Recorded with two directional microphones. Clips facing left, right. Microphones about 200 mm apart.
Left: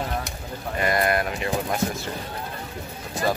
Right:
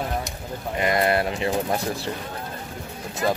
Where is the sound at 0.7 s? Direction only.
20° right (ahead or behind).